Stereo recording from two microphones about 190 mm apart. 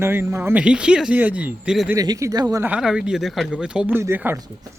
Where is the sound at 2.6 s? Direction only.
5° right (ahead or behind).